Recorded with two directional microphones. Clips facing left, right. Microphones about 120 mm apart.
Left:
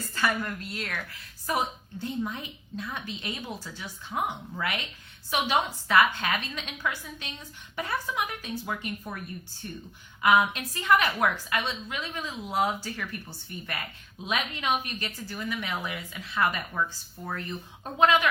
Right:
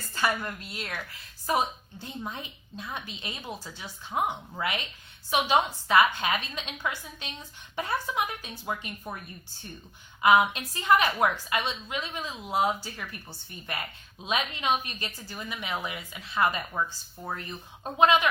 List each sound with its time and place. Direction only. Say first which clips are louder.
0.1 s a woman's voice: even; 20° right (ahead or behind)
10.2 s a woman's voice: right 1 dB; 20° right (ahead or behind)
14.3 s a woman's voice: right 1 dB; 25° right (ahead or behind)
17.9 s a woman's voice: right 1 dB; 20° right (ahead or behind)